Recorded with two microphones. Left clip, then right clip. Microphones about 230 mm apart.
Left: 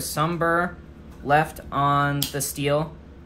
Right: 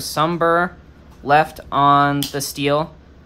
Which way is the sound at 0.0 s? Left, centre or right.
Centre.